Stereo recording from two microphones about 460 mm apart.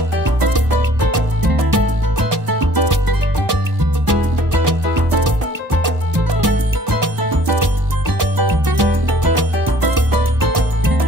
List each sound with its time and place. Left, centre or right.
1.1 s music: right
6.4 s music: right
8.2 s music: right